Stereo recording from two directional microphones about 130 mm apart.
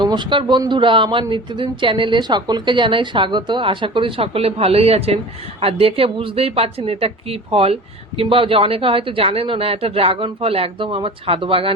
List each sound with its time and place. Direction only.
0.0 s speech: 35° right (ahead or behind)